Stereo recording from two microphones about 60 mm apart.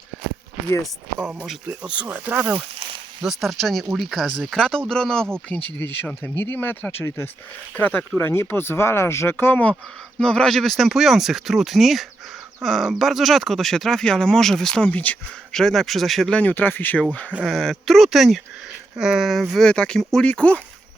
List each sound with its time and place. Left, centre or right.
1.6 s speech: centre; by 2.6 s right
3.2 s speech: centre
5.5 s speech: left
8.2 s speech: left
10.2 s speech: centre
14.8 s speech: left
15.5 s speech: centre
16.3 s speech: left
17.4 s speech: centre
19.6 s speech: centre
20.0 s speech: centre
20.2 s speech: left